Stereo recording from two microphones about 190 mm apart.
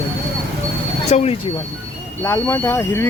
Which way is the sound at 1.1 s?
35° left (ahead or behind).